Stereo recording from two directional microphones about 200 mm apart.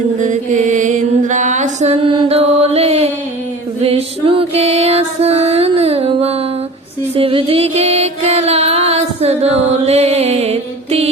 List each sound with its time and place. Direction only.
0.2 s mantra: 40° right (ahead or behind)
3.8 s music: 30° right (ahead or behind)